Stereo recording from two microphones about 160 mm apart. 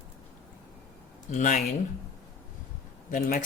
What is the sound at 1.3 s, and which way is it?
Speech, 55° left (ahead or behind).